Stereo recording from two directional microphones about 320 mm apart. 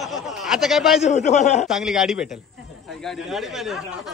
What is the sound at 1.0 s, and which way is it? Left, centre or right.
Speech, left.